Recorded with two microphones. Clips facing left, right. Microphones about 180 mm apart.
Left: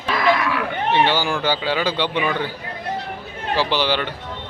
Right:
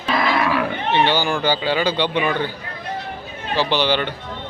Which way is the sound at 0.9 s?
5° left (ahead or behind).